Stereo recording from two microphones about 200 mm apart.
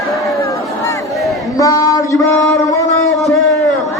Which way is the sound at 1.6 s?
15° left (ahead or behind).